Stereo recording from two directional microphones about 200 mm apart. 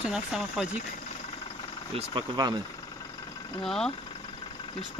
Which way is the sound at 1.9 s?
25° right (ahead or behind).